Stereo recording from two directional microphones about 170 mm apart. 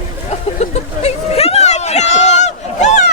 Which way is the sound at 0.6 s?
40° left (ahead or behind).